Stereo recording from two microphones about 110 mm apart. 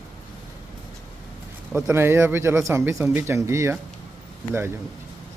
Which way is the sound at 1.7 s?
20° right (ahead or behind).